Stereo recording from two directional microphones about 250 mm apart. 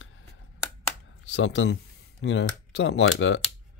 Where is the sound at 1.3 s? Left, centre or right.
Left.